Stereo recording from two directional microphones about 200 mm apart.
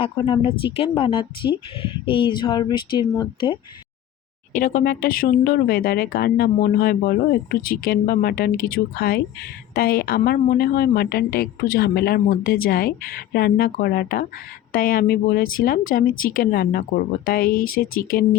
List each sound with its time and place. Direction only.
0.0 s speech: 25° left (ahead or behind)
4.5 s speech: 50° left (ahead or behind)